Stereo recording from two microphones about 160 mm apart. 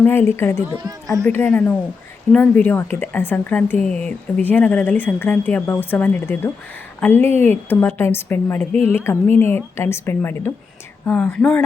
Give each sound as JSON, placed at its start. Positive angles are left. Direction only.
{"t": 0.0, "sound": "a woman's voice", "side_deg": 15}
{"t": 7.3, "sound": "speech", "side_deg": -45}
{"t": 7.7, "sound": "a woman's voice", "side_deg": 10}